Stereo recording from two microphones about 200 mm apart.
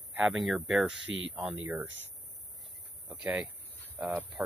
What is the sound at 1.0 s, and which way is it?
Speech, 75° right (ahead or behind).